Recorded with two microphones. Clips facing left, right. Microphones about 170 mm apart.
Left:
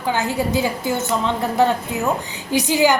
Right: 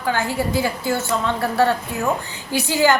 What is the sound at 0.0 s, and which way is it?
A woman's voice, 20° left (ahead or behind).